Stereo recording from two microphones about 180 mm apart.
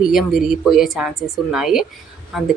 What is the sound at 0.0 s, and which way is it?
Speech, centre (ahead or behind).